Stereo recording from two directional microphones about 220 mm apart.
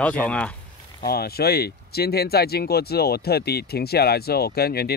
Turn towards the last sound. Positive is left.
turn(degrees=45)  # may be behind; listen again after turning